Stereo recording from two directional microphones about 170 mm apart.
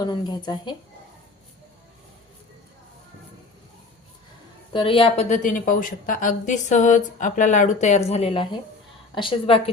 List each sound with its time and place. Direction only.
0.0 s a woman's voice: 25° left (ahead or behind)
4.7 s a woman's voice: 30° left (ahead or behind)